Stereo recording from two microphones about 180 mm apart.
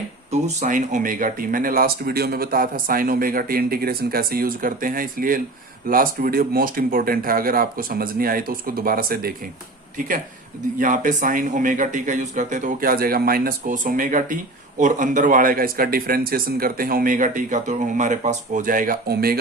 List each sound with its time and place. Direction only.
0.3 s speech: 40° right (ahead or behind)
10.8 s speech: 45° right (ahead or behind)